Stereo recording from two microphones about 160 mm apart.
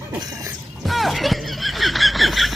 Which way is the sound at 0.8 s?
Centre (ahead or behind).